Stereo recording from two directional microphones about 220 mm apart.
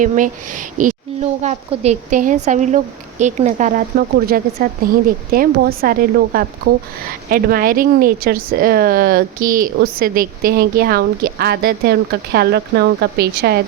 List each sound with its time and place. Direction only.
0.0 s speech: 35° right (ahead or behind)